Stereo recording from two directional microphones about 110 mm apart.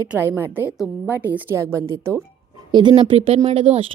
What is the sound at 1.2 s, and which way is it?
Speech, 20° right (ahead or behind).